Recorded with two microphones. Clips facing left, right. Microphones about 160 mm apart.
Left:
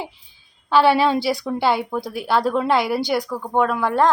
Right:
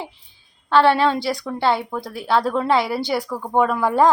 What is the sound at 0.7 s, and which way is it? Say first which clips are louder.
A woman's voice: even; 10° left (ahead or behind).